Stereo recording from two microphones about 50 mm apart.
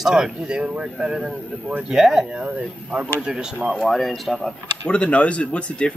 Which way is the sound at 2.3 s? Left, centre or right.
Right.